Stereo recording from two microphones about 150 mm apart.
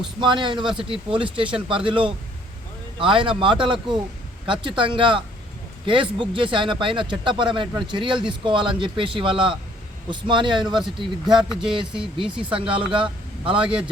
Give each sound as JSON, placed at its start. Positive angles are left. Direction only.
{"t": 0.2, "sound": "speech", "side_deg": -30}
{"t": 11.3, "sound": "speech", "side_deg": -5}
{"t": 12.5, "sound": "speech", "side_deg": -35}